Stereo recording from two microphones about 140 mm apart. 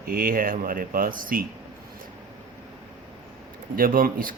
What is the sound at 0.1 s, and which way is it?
Speech, 90° right.